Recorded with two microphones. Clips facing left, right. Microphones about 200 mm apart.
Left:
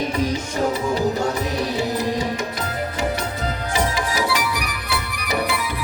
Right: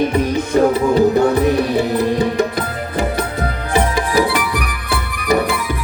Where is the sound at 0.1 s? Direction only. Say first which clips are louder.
Right 7 dB; 60° right (ahead or behind).